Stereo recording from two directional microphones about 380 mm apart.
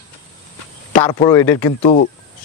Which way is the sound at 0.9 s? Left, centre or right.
Centre.